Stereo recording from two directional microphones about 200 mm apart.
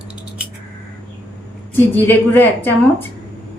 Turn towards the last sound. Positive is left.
turn(degrees=10)  # may be behind; listen again after turning